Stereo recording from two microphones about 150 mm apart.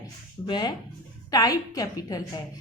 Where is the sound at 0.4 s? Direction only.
30° left (ahead or behind).